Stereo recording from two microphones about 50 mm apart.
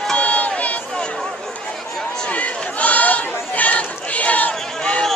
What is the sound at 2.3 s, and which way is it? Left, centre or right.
Chatter, left.